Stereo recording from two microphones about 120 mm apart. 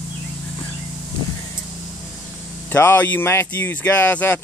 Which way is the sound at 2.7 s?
20° left (ahead or behind).